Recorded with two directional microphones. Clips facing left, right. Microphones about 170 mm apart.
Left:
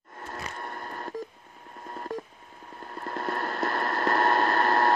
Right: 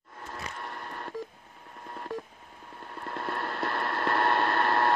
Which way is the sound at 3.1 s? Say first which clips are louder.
Left 3 dB; 40° left (ahead or behind).